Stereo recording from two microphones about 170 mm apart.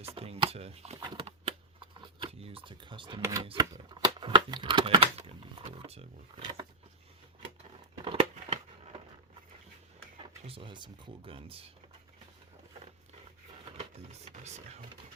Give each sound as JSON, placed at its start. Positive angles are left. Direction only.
{"t": 0.0, "sound": "chopping", "side_deg": -35}
{"t": 0.9, "sound": "shuffling cards", "side_deg": -30}
{"t": 3.2, "sound": "speech", "side_deg": -15}
{"t": 3.4, "sound": "typewriter", "side_deg": -30}
{"t": 8.0, "sound": "a sound", "side_deg": -35}
{"t": 10.4, "sound": "typewriter", "side_deg": -30}
{"t": 13.7, "sound": "sewing machine", "side_deg": -35}